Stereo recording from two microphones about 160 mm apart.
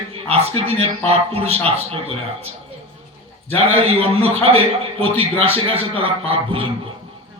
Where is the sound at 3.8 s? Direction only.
35° right (ahead or behind).